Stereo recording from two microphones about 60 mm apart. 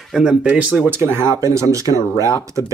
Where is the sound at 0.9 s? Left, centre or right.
Right.